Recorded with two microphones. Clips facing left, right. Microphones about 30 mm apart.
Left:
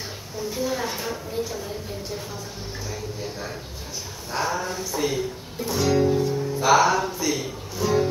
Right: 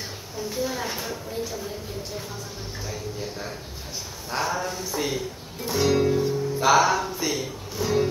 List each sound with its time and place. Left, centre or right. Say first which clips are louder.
0.6 s a woman's voice: left 2 dB; centre
2.9 s a woman's voice: even; centre
6.7 s a woman's voice: left 2 dB; centre
7.1 s speech: left 1 dB; centre
7.8 s music: left 2 dB; centre